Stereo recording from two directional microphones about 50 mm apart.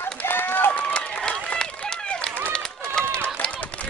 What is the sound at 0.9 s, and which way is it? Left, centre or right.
Run, centre.